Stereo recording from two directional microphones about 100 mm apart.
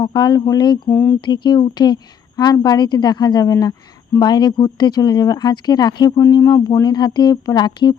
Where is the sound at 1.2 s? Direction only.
50° left (ahead or behind).